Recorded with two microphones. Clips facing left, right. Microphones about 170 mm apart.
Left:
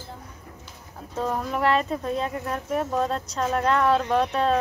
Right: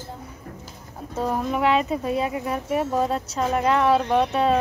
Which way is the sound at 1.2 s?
5° right (ahead or behind).